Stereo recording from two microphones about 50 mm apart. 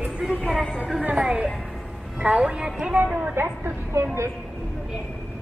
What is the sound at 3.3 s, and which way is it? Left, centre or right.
Speech, right.